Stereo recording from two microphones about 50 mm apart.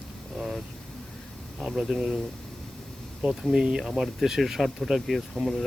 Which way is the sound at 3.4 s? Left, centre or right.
Centre.